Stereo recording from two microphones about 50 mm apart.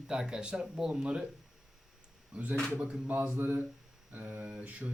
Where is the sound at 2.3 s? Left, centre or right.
Right.